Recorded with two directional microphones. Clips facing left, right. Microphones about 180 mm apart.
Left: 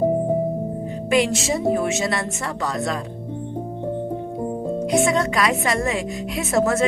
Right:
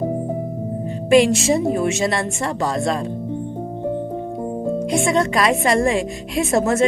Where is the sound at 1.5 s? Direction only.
25° right (ahead or behind).